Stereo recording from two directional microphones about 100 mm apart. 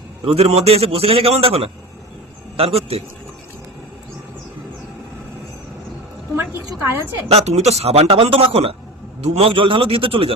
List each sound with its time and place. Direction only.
0.3 s a man's voice: 90° right
7.3 s a man's voice: 90° right; by 10.3 s 70° right (ahead or behind)